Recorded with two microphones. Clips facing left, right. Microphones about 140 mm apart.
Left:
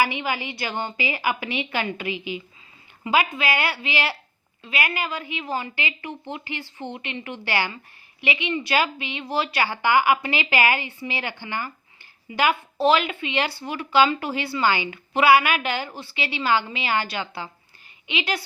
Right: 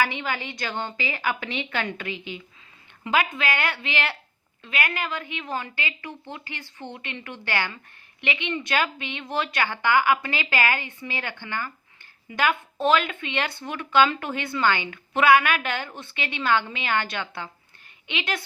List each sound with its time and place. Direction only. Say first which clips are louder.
0.0 s a woman's voice: left 2 dB; 10° left (ahead or behind)